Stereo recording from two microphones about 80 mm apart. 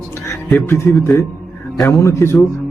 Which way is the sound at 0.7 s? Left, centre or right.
Left.